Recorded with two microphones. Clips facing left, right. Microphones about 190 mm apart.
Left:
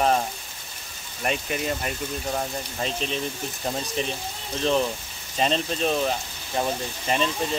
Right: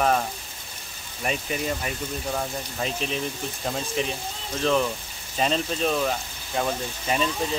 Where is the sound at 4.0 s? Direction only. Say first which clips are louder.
Right 1 dB; 35° left (ahead or behind).